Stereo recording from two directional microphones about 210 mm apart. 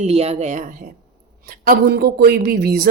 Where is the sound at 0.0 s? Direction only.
30° right (ahead or behind).